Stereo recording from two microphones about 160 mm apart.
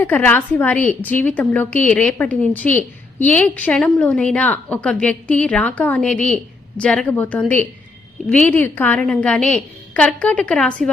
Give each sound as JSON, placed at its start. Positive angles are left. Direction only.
{"t": 0.0, "sound": "a woman's voice", "side_deg": 10}